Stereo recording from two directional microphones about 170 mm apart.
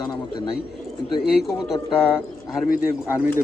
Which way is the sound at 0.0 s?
25° left (ahead or behind).